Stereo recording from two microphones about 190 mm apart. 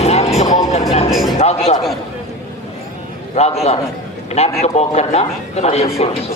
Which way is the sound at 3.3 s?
35° left (ahead or behind).